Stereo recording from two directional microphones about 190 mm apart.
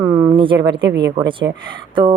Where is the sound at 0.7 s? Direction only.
70° right (ahead or behind).